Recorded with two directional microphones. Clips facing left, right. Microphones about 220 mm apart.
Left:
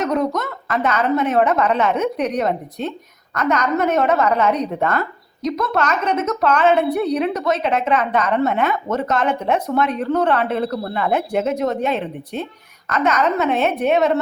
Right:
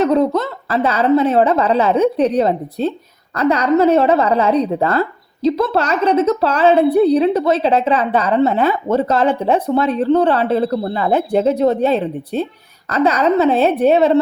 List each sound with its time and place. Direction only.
0.0 s a woman's voice: 30° right (ahead or behind)